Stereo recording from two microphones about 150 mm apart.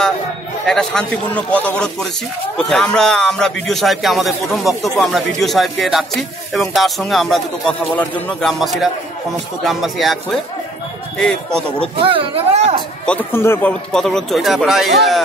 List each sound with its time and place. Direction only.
0.7 s speech: 5° left (ahead or behind)
11.1 s speech: 5° left (ahead or behind)
12.0 s speech: 35° right (ahead or behind)
13.0 s speech: 10° left (ahead or behind)